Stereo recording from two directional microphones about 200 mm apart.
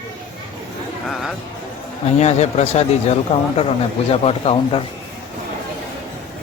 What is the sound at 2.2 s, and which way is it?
Speech, 35° left (ahead or behind).